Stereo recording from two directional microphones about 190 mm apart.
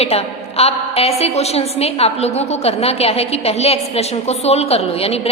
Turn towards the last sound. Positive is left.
turn(degrees=30)  # may be behind; listen again after turning